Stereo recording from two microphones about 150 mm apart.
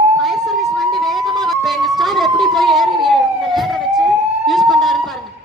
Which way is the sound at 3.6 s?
Centre (ahead or behind).